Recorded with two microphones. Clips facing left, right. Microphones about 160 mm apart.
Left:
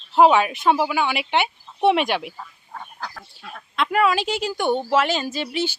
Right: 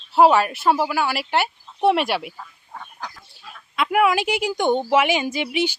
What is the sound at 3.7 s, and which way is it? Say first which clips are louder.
Speech: right 1 dB; 10° right (ahead or behind).